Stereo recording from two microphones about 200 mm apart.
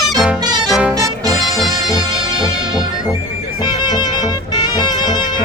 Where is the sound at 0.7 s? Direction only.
5° right (ahead or behind).